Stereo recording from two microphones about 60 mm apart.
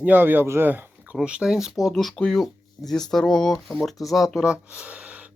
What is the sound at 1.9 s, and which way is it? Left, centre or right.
Speech, centre.